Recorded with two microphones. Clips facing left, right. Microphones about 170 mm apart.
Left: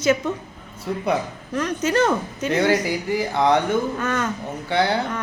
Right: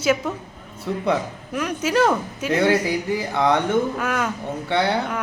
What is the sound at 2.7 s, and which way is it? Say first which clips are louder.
Speech: right 2 dB; 25° right (ahead or behind).